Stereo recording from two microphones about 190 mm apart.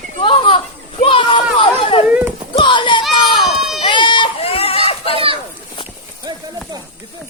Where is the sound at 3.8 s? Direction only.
25° left (ahead or behind).